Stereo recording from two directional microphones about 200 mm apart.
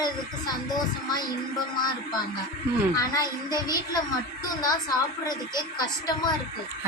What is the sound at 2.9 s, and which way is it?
Child singing, 20° left (ahead or behind).